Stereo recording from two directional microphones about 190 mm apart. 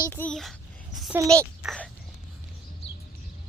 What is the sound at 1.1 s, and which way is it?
Speech, 15° right (ahead or behind).